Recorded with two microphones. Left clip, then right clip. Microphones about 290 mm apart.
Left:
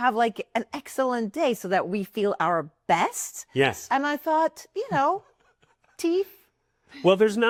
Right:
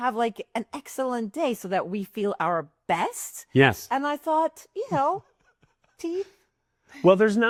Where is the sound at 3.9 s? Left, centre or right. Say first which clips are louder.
Left 1 dB; left.